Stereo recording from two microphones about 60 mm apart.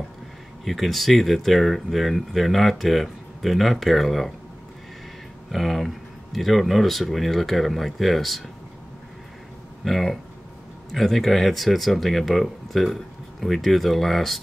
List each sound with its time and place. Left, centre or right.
0.7 s speech: centre
5.5 s speech: centre
9.8 s speech: centre